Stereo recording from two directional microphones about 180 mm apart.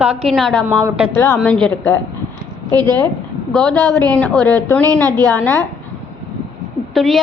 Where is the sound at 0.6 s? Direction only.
15° right (ahead or behind).